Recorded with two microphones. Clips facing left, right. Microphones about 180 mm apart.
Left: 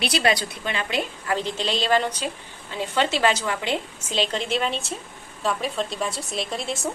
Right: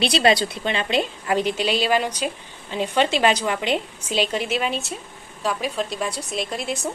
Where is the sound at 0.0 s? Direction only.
25° right (ahead or behind); by 6.9 s centre (ahead or behind).